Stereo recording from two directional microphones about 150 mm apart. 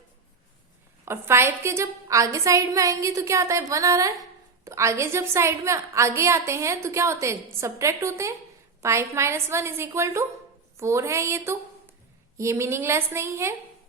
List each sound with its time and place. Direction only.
1.0 s a woman's voice: 15° right (ahead or behind)